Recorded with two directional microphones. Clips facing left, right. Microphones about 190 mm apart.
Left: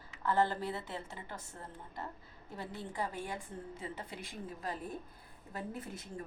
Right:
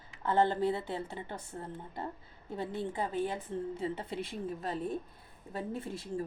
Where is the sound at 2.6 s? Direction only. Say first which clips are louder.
Right 5 dB; 25° right (ahead or behind).